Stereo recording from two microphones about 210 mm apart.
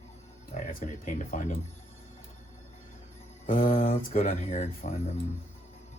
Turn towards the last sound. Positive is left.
turn(degrees=35)  # may be behind; listen again after turning